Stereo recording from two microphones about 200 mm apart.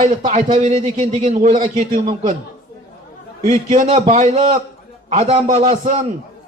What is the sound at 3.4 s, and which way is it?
A man's voice, 35° right (ahead or behind).